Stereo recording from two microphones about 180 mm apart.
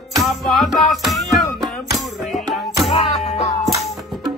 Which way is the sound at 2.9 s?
30° left (ahead or behind).